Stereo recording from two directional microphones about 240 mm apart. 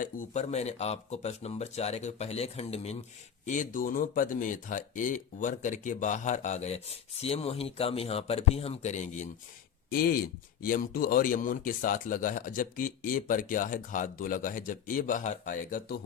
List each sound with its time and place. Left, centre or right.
0.0 s speech: left